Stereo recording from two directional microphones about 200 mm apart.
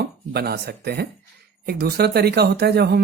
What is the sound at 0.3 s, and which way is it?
Speech, 55° right (ahead or behind).